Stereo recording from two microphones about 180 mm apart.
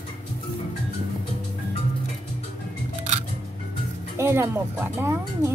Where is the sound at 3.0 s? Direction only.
40° right (ahead or behind).